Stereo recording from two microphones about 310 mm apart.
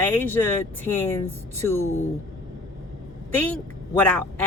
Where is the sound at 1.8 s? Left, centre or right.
Left.